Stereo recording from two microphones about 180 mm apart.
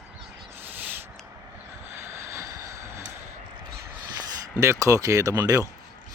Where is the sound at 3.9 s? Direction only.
15° right (ahead or behind).